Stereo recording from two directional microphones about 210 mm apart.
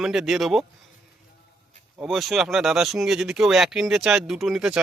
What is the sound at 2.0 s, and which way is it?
Speech, centre (ahead or behind).